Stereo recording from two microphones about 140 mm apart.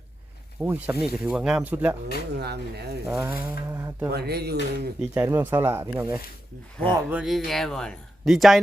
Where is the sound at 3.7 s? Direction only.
20° right (ahead or behind).